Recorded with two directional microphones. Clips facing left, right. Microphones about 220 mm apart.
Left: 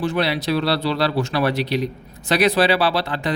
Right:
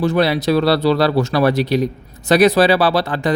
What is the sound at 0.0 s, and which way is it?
Speech, 45° right (ahead or behind).